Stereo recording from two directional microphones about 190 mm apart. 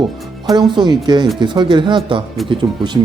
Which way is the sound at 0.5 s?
25° right (ahead or behind).